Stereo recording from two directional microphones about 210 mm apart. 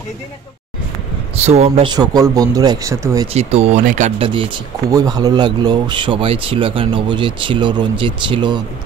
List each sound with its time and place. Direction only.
1.4 s speech: 30° right (ahead or behind); by 3.3 s 15° right (ahead or behind)
3.3 s speech: 30° right (ahead or behind)
4.9 s a man's voice: 15° right (ahead or behind)